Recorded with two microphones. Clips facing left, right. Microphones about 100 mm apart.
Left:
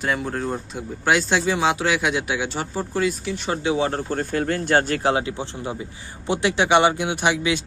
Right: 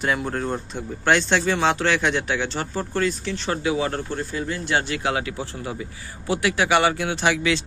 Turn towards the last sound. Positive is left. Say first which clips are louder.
# even
turn(degrees=20)  # may be behind; listen again after turning